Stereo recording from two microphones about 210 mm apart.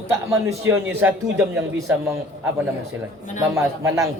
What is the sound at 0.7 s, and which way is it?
Speech, 10° right (ahead or behind).